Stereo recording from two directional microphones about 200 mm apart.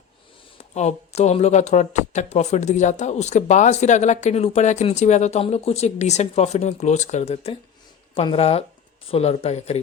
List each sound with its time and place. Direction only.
0.6 s speech: 35° left (ahead or behind)